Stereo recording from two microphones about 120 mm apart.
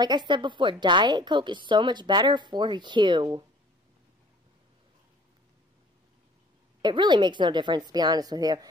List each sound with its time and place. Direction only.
0.0 s a woman's voice: 40° right (ahead or behind)
6.8 s a woman's voice: 40° right (ahead or behind)